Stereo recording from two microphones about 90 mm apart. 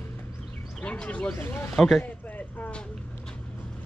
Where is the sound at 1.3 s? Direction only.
25° left (ahead or behind).